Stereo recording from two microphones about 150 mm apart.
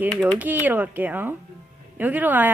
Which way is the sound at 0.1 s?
5° left (ahead or behind).